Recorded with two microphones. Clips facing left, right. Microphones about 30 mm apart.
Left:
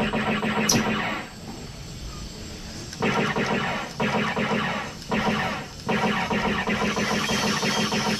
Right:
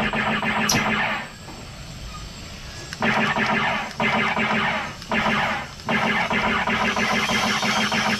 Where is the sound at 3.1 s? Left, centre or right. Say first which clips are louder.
Right 4 dB; right.